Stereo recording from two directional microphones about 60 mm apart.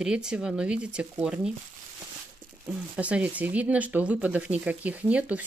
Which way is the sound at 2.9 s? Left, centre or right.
Right.